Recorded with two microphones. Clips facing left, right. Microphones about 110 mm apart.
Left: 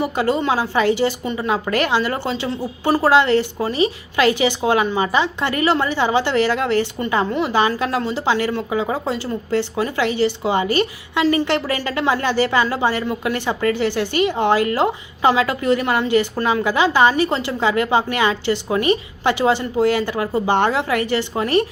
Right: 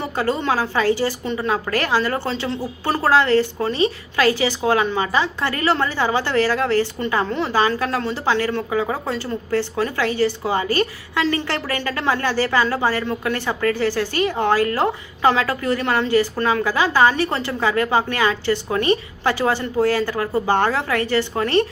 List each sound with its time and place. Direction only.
0.0 s a woman's voice: 10° left (ahead or behind)